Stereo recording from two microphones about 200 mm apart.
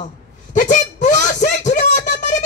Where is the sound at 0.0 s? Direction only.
40° left (ahead or behind).